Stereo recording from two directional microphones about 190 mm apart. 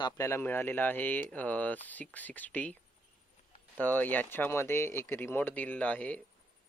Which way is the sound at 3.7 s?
10° left (ahead or behind).